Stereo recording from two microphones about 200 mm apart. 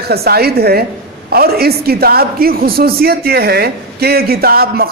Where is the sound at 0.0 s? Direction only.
50° right (ahead or behind).